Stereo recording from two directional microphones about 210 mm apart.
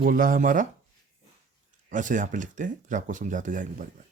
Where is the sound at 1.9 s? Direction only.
35° right (ahead or behind).